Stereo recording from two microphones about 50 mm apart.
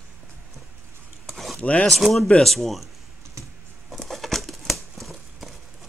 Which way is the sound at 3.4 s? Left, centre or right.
Right.